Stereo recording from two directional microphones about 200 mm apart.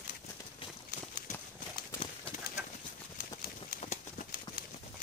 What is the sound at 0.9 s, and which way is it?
Horse, 40° left (ahead or behind).